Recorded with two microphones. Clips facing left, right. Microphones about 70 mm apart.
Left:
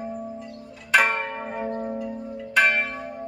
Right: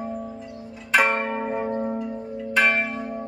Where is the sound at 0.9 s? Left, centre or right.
Centre.